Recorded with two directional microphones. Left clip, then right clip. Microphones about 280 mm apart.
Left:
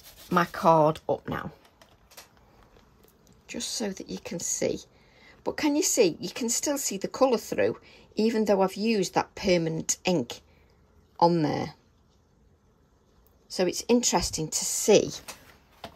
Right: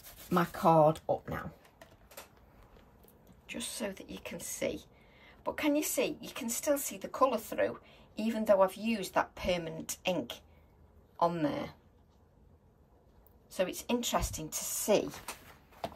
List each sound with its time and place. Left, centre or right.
0.3 s speech: left
3.3 s speech: centre
13.5 s speech: centre